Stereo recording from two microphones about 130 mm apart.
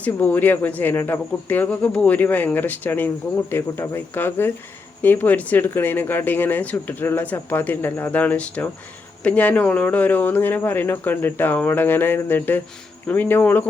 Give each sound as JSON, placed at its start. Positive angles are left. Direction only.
{"t": 0.0, "sound": "speech", "side_deg": 15}